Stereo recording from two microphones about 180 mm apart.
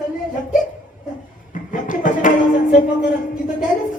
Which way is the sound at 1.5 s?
45° left (ahead or behind).